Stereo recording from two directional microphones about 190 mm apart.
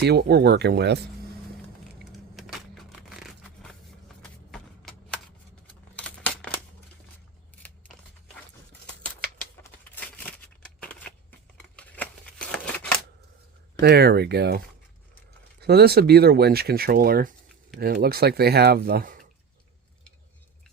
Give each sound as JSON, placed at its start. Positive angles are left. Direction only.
{"t": 0.0, "sound": "speech", "side_deg": -60}
{"t": 2.3, "sound": "a sound", "side_deg": 0}
{"t": 9.0, "sound": "a sound", "side_deg": 5}
{"t": 11.8, "sound": "shuffling cards", "side_deg": 5}
{"t": 13.8, "sound": "speech", "side_deg": -55}
{"t": 15.6, "sound": "speech", "side_deg": -55}